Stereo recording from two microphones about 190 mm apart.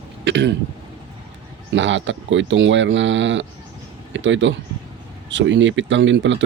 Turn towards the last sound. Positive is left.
turn(degrees=-75)  # may be behind; listen again after turning